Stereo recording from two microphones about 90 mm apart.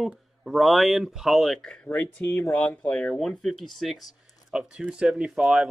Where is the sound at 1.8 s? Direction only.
20° left (ahead or behind).